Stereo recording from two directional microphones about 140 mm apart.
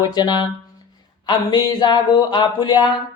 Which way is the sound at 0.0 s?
30° left (ahead or behind).